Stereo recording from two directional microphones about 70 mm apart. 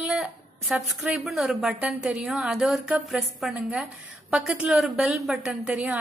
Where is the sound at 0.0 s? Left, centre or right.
Centre.